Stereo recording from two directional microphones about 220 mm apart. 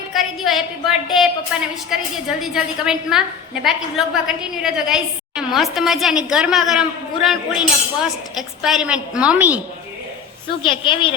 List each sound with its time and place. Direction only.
0.1 s a woman's voice: centre (ahead or behind)
10.6 s a woman's voice: 20° left (ahead or behind)